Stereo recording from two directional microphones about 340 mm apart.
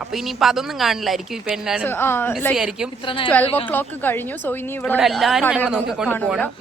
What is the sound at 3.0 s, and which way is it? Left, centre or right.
Speech, centre.